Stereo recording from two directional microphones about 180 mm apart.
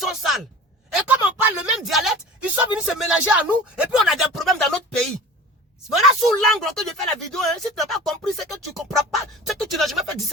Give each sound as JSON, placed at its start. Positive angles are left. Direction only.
{"t": 0.0, "sound": "a sound", "side_deg": 0}
{"t": 0.9, "sound": "speech", "side_deg": -10}
{"t": 5.9, "sound": "speech", "side_deg": 0}